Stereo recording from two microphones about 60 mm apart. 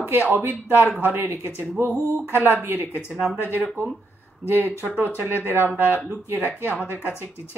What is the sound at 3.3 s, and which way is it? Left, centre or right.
Speech, left.